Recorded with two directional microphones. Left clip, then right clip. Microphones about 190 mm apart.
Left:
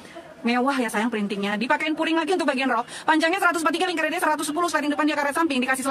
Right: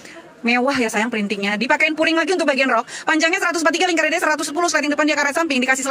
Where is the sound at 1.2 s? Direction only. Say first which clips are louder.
Right 5 dB; 15° right (ahead or behind).